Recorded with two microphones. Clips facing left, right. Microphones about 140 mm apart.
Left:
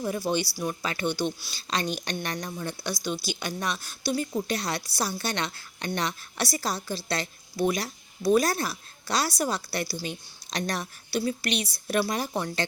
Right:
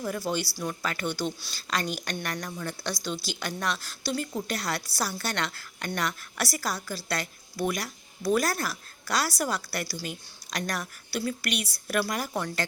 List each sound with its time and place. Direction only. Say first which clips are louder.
0.0 s a woman's voice: left 2 dB; 20° left (ahead or behind)